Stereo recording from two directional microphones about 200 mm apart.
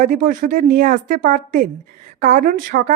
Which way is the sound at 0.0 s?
40° right (ahead or behind).